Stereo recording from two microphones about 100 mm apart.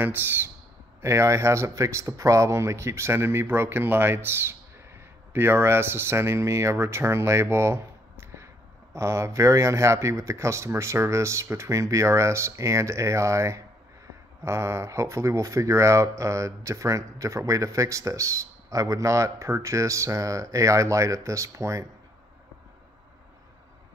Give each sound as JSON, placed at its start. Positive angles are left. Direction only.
{"t": 1.0, "sound": "speech", "side_deg": -30}